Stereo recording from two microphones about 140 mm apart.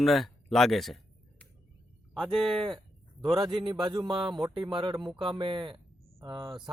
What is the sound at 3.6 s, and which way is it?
Speech, 35° right (ahead or behind).